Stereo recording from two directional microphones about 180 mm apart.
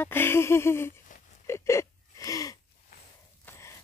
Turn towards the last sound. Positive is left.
turn(degrees=15)  # may be behind; listen again after turning